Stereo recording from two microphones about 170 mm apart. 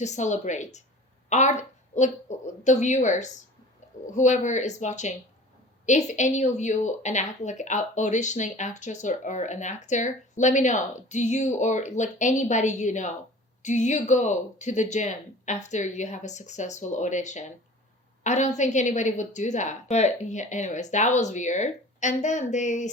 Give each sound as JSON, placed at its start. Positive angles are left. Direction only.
{"t": 0.0, "sound": "a woman's voice", "side_deg": 45}